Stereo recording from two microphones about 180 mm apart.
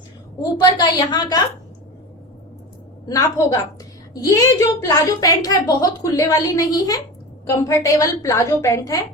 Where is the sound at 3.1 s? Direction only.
20° left (ahead or behind).